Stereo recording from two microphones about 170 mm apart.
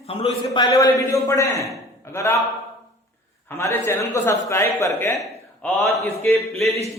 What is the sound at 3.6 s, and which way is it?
A man's voice, 15° left (ahead or behind).